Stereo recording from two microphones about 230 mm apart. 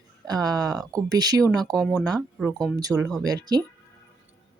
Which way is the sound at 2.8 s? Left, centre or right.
Centre.